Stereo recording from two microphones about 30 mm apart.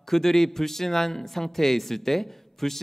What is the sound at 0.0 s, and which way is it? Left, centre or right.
Speech, centre.